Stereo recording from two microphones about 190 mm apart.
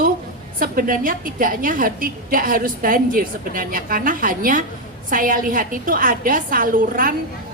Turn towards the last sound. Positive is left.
turn(degrees=-45)  # may be behind; listen again after turning